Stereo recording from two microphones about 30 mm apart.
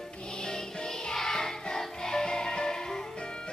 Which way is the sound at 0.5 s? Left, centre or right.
Left.